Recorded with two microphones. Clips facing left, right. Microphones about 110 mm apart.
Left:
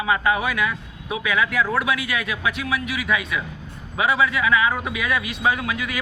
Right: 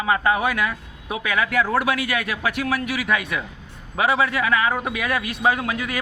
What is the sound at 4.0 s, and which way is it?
A man's voice, 40° right (ahead or behind).